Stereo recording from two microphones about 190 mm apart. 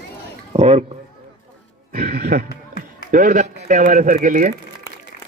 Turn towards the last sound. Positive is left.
turn(degrees=-45)  # may be behind; listen again after turning